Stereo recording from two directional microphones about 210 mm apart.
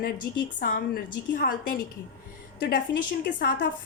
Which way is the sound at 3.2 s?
45° left (ahead or behind).